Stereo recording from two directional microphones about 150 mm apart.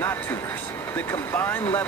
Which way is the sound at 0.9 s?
15° left (ahead or behind).